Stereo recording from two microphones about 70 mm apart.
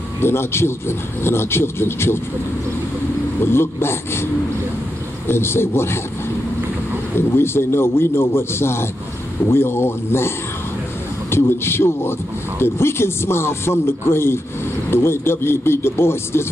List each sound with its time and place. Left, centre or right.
0.2 s a man's voice: left
3.3 s a man's voice: left
5.3 s a man's voice: left
7.2 s a man's voice: left